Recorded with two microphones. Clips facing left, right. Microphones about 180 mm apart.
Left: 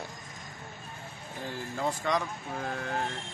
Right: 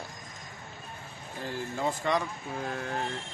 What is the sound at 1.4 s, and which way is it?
Speech, centre (ahead or behind).